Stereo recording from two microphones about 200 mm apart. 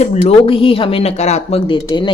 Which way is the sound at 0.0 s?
30° left (ahead or behind).